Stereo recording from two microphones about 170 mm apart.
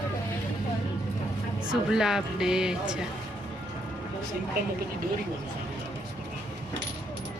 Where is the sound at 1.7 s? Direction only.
5° right (ahead or behind).